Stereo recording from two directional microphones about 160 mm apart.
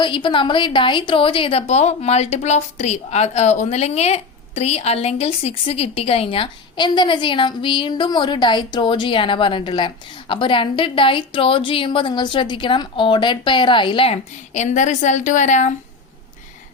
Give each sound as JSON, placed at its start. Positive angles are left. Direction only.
{"t": 0.0, "sound": "speech", "side_deg": 30}